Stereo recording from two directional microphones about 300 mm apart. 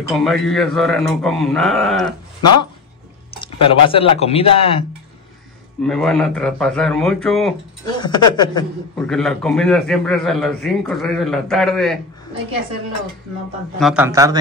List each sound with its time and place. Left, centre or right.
0.1 s a man's voice: centre
3.3 s speech: centre
5.9 s a man's voice: centre
7.8 s a woman's voice: centre
8.9 s a man's voice: centre
13.7 s a man's voice: centre